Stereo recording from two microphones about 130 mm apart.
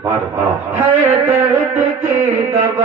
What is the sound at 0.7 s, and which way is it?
Speech, 65° right (ahead or behind).